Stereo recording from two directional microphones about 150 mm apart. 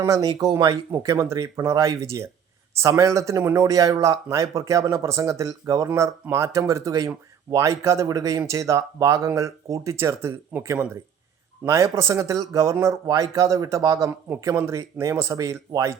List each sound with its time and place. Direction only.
0.0 s speech: 25° right (ahead or behind)